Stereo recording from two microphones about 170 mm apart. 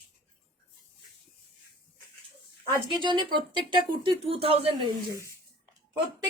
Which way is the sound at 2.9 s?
30° right (ahead or behind).